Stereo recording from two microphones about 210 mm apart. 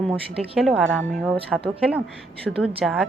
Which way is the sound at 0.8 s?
65° right (ahead or behind).